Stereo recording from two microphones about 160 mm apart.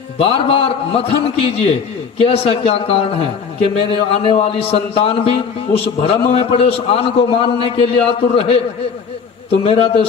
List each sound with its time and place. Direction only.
0.2 s a man's voice: 35° left (ahead or behind)